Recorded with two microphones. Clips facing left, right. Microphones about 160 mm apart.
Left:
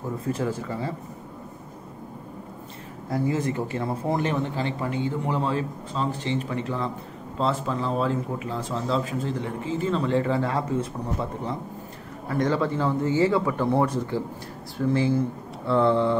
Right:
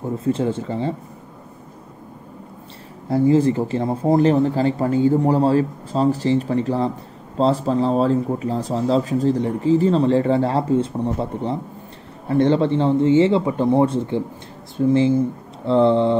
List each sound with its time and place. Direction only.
0.0 s a man's voice: 25° right (ahead or behind)
3.1 s a man's voice: 30° right (ahead or behind)